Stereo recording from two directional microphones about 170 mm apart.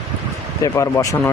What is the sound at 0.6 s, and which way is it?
Speech, 20° left (ahead or behind).